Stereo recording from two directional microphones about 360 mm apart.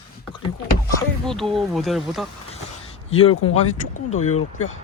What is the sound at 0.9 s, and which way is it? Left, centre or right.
Speech, centre.